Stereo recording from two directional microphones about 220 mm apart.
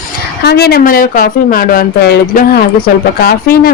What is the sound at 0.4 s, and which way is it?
A woman's voice, 45° left (ahead or behind).